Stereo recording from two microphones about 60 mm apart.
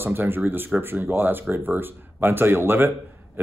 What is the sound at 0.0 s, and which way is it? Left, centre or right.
Speech, right.